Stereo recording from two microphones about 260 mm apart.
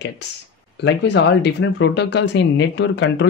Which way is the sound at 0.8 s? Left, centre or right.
Left.